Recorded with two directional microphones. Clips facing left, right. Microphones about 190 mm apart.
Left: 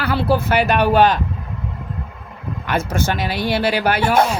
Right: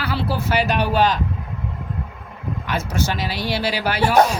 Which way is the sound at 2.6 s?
55° left (ahead or behind).